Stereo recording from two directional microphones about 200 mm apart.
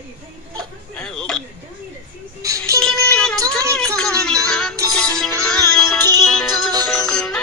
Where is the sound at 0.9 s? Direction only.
5° left (ahead or behind).